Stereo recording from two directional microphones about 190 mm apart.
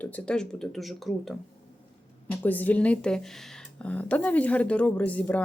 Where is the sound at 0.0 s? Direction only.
10° left (ahead or behind).